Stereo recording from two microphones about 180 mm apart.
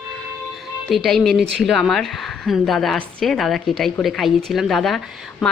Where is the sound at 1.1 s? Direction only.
Centre (ahead or behind).